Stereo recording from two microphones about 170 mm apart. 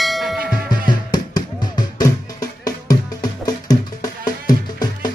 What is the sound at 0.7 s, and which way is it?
Music, 25° left (ahead or behind).